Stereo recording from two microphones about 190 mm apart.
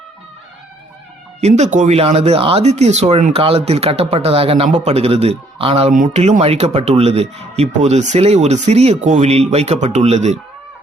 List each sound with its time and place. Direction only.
1.4 s speech: 35° right (ahead or behind)